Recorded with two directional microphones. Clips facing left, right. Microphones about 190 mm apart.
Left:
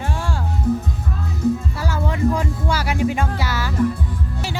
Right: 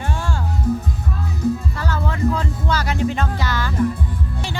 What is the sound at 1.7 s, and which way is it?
Speech, 10° left (ahead or behind).